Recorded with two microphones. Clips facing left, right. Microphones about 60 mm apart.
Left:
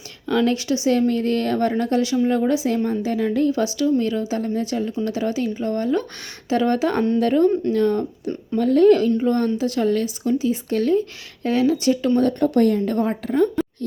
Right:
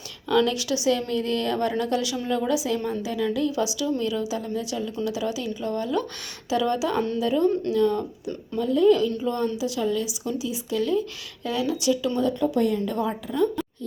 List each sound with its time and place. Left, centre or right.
0.3 s a woman's voice: left
8.5 s speech: left
12.3 s speech: left